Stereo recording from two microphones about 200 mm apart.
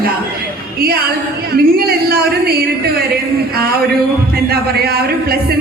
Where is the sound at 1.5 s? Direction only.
50° right (ahead or behind).